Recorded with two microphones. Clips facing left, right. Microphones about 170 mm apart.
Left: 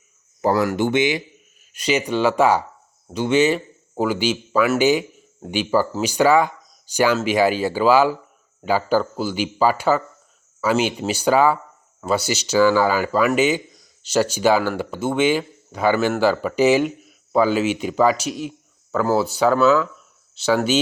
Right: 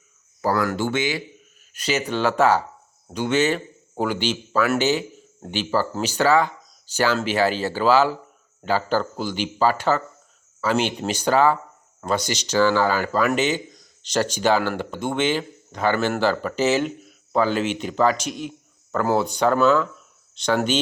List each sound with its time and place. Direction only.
0.4 s speech: 20° left (ahead or behind)